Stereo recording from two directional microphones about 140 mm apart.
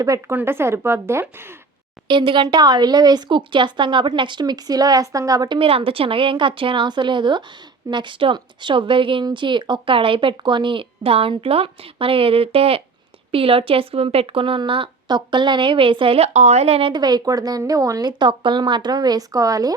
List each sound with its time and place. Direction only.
0.0 s a woman's voice: 25° right (ahead or behind)
2.0 s speech: 35° right (ahead or behind)
5.5 s speech: 40° right (ahead or behind)
16.9 s speech: 30° right (ahead or behind)